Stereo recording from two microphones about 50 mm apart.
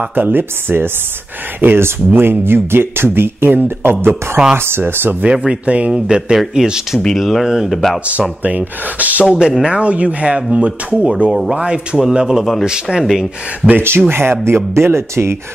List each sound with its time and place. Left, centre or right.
0.1 s speech: right
5.2 s speech: right
7.2 s speech: centre
7.7 s speech: centre
8.1 s speech: right
9.3 s speech: centre
13.7 s speech: right